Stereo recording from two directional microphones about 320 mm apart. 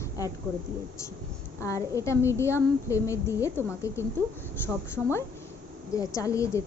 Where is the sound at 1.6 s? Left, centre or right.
Centre.